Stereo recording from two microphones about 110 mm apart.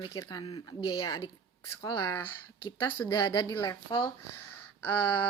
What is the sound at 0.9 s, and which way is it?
Speech, 50° left (ahead or behind).